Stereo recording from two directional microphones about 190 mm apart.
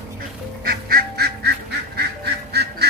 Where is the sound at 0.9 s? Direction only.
55° right (ahead or behind).